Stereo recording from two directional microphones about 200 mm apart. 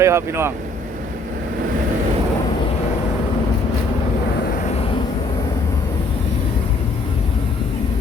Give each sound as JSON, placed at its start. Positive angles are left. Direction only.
{"t": 0.0, "sound": "speech", "side_deg": -15}
{"t": 4.7, "sound": "vehicle", "side_deg": 30}